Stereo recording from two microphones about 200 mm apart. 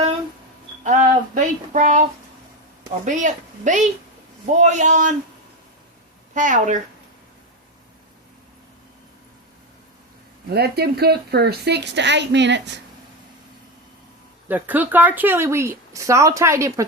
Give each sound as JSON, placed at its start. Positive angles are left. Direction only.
{"t": 0.9, "sound": "a sound", "side_deg": -40}
{"t": 3.0, "sound": "speech", "side_deg": -40}
{"t": 6.3, "sound": "speech", "side_deg": -40}
{"t": 10.5, "sound": "a woman's voice", "side_deg": -50}
{"t": 14.4, "sound": "speech", "side_deg": -10}